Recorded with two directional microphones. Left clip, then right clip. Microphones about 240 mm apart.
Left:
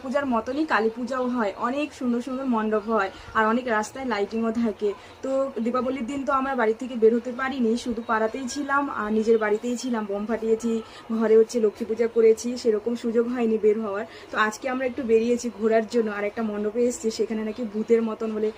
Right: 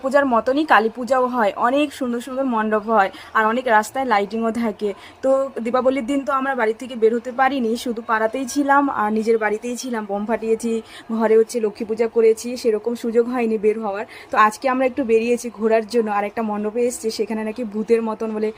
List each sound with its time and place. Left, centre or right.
0.1 s a woman's voice: right
5.7 s a woman's voice: right